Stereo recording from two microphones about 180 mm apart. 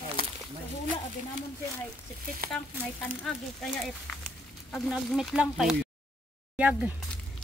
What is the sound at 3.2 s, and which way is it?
Speech, centre (ahead or behind).